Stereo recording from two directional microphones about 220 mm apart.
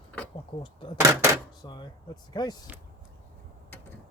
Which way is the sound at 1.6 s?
20° left (ahead or behind).